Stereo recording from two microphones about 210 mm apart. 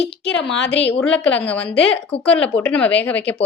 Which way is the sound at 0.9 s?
5° left (ahead or behind).